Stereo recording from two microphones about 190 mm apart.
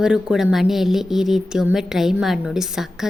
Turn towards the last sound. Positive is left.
turn(degrees=0)  # may be behind; listen again after turning